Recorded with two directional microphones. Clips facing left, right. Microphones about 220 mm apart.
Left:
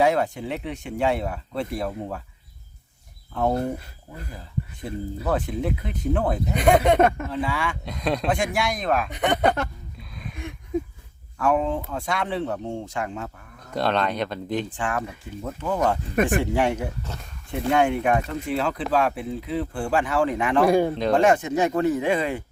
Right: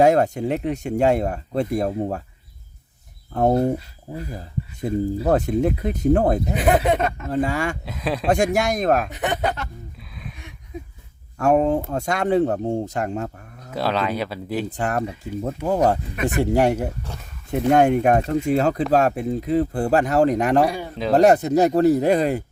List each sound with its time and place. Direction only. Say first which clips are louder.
0.0 s speech: right 5 dB; 45° right (ahead or behind)
4.8 s speech: right 11 dB; 45° right (ahead or behind)
6.5 s speech: even; 5° right (ahead or behind)
7.3 s speech: right 5 dB; 45° right (ahead or behind)
7.9 s speech: even; 5° right (ahead or behind)
8.3 s speech: right 5 dB; 45° right (ahead or behind)
9.0 s speech: left 2 dB; 5° right (ahead or behind)
11.3 s speech: right 5 dB; 40° right (ahead or behind)
13.7 s speech: right 1 dB; 5° right (ahead or behind)
14.7 s speech: right 4 dB; 40° right (ahead or behind)
20.7 s speech: left 8 dB; 50° left (ahead or behind)
21.2 s speech: right 6 dB; 40° right (ahead or behind)